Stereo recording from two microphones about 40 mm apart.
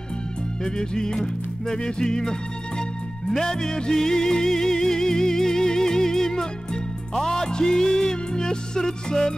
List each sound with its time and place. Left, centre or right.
0.7 s music: centre